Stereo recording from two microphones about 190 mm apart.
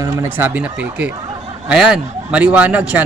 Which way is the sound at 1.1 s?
25° right (ahead or behind).